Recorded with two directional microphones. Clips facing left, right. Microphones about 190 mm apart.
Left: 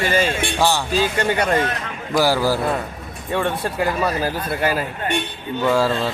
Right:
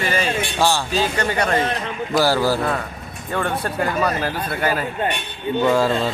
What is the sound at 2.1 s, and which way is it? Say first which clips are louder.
Speech: even; 10° left (ahead or behind).